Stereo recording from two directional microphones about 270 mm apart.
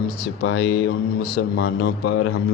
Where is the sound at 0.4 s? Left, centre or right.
Left.